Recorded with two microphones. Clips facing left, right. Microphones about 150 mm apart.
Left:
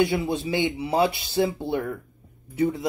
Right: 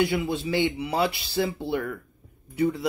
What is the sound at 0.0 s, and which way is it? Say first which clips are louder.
Speech: left 2 dB; 25° left (ahead or behind).